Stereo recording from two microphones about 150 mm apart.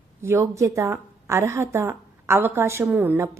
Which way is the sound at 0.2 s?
20° right (ahead or behind).